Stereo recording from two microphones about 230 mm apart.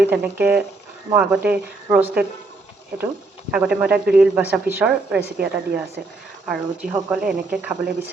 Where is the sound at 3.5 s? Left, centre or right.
Centre.